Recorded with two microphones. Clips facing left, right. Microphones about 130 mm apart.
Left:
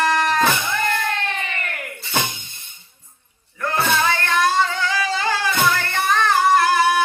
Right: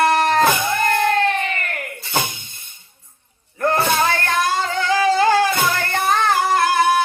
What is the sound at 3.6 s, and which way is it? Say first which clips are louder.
Music: right 3 dB; 45° right (ahead or behind).